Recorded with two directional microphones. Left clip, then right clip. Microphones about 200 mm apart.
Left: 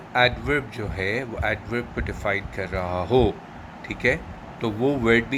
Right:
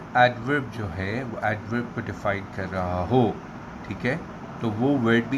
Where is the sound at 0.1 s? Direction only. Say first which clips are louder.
Right 1 dB; 25° left (ahead or behind).